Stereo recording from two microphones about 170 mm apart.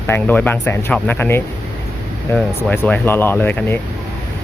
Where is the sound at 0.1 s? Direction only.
10° left (ahead or behind).